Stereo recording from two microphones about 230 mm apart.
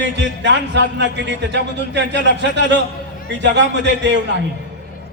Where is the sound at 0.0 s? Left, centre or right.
Right.